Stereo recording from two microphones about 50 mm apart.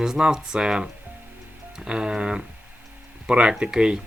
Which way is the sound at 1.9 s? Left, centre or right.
Centre.